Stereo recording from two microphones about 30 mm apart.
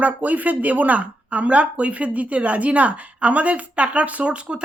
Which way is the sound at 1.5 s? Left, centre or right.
Right.